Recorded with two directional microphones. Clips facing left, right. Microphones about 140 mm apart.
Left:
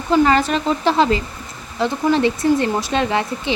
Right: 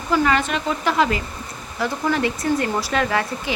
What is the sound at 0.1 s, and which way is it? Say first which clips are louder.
Speech: left 4 dB; 35° left (ahead or behind).